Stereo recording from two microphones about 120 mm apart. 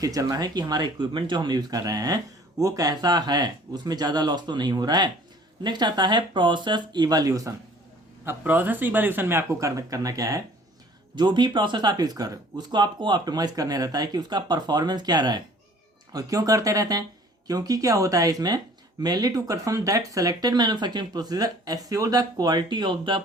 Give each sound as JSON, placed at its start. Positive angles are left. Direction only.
{"t": 0.0, "sound": "speech", "side_deg": -30}
{"t": 8.2, "sound": "speech", "side_deg": -20}
{"t": 11.1, "sound": "speech", "side_deg": -40}